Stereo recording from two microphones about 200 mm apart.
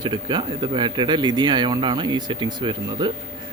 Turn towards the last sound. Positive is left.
turn(degrees=-25)  # may be behind; listen again after turning